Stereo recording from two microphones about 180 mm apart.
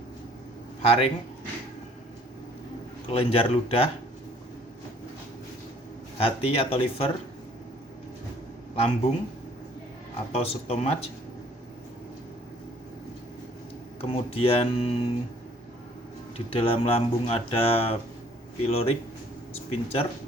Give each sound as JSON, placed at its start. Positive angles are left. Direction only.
{"t": 0.8, "sound": "speech", "side_deg": 30}
{"t": 3.1, "sound": "speech", "side_deg": 30}
{"t": 6.1, "sound": "speech", "side_deg": 30}
{"t": 8.7, "sound": "speech", "side_deg": 35}
{"t": 10.3, "sound": "speech", "side_deg": 35}
{"t": 14.0, "sound": "speech", "side_deg": 30}
{"t": 16.5, "sound": "speech", "side_deg": 30}